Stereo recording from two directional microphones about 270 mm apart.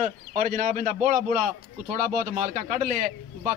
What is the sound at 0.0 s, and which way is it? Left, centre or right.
Speech, right.